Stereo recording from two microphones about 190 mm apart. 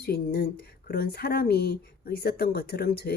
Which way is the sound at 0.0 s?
55° left (ahead or behind).